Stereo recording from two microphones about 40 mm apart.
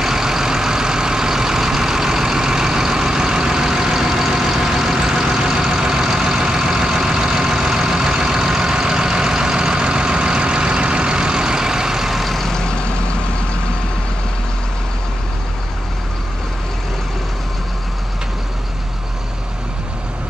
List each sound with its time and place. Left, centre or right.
0.0 s vehicle: centre
12.4 s vehicle: centre